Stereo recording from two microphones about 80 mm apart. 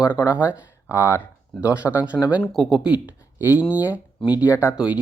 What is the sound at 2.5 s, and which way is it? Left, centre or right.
Speech, centre.